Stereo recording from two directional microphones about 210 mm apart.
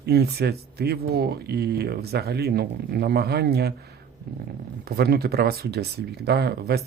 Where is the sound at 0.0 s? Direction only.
50° right (ahead or behind).